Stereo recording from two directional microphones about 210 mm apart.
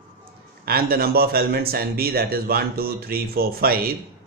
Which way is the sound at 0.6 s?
45° right (ahead or behind).